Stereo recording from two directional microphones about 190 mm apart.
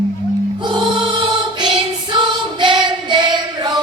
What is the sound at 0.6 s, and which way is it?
Music, 25° right (ahead or behind).